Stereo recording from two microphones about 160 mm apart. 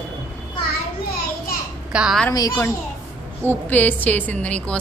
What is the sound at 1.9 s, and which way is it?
Speech, 5° right (ahead or behind).